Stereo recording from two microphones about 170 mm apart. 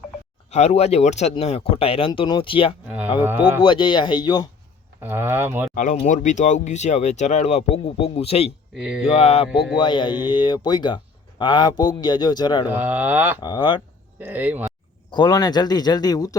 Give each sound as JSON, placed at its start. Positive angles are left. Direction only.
{"t": 0.5, "sound": "speech", "side_deg": 40}
{"t": 3.2, "sound": "mantra", "side_deg": -10}
{"t": 3.6, "sound": "speech", "side_deg": 30}
{"t": 5.0, "sound": "mantra", "side_deg": -15}
{"t": 5.7, "sound": "speech", "side_deg": 50}
{"t": 8.8, "sound": "speech", "side_deg": -5}
{"t": 9.0, "sound": "speech", "side_deg": 35}
{"t": 12.6, "sound": "mantra", "side_deg": -10}
{"t": 13.4, "sound": "speech", "side_deg": 25}
{"t": 14.2, "sound": "mantra", "side_deg": -10}
{"t": 15.1, "sound": "speech", "side_deg": 25}